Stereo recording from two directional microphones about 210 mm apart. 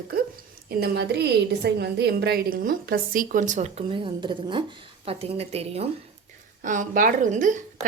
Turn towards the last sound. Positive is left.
turn(degrees=-35)  # may be behind; listen again after turning